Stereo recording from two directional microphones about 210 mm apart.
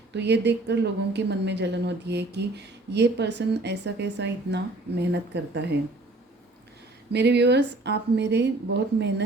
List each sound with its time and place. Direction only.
0.1 s a woman's voice: 55° right (ahead or behind)
7.1 s a woman's voice: 55° right (ahead or behind)